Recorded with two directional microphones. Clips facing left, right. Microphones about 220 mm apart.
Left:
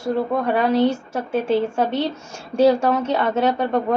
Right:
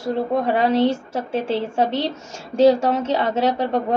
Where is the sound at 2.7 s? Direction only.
25° right (ahead or behind).